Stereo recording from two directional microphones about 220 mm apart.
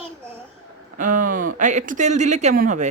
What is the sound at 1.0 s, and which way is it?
Speech, 35° right (ahead or behind).